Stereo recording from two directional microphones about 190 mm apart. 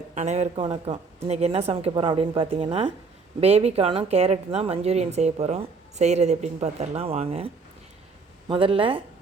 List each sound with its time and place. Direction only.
0.1 s a woman's voice: 35° right (ahead or behind)